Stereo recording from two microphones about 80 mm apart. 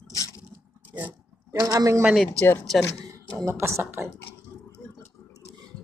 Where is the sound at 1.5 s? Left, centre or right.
Right.